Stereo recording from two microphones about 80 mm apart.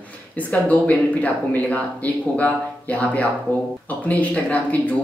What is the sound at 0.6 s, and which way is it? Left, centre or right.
A man's voice, centre.